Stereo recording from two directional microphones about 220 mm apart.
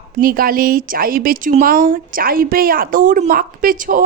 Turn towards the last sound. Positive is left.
turn(degrees=-40)  # may be behind; listen again after turning